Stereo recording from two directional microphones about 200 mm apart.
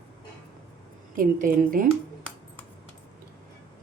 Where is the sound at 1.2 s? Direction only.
40° right (ahead or behind).